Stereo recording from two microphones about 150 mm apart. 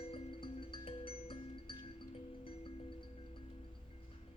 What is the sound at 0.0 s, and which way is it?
Music, 40° left (ahead or behind).